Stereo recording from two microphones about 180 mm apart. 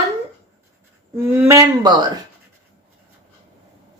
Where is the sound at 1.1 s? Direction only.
15° right (ahead or behind).